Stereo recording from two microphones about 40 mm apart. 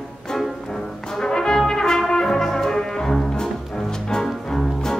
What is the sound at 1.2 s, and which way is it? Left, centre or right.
Brass instrument, centre.